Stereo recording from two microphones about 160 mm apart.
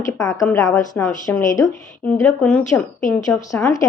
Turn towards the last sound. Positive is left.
turn(degrees=10)  # may be behind; listen again after turning